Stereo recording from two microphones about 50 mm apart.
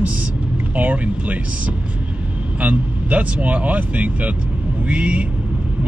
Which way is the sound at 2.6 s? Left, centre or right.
Right.